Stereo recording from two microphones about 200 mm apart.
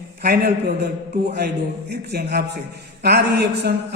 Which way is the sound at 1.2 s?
50° right (ahead or behind).